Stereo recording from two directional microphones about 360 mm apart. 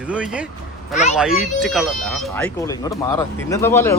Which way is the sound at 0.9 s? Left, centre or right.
Centre.